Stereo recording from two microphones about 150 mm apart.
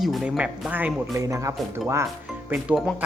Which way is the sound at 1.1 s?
20° right (ahead or behind).